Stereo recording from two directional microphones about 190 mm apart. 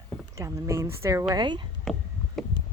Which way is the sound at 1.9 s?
Centre (ahead or behind).